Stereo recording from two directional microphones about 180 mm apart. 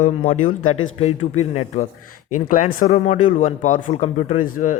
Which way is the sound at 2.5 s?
50° left (ahead or behind).